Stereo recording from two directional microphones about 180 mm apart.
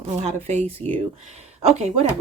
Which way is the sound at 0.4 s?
40° right (ahead or behind).